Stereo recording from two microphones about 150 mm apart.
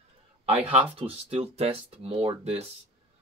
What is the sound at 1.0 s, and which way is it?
Speech, 40° right (ahead or behind).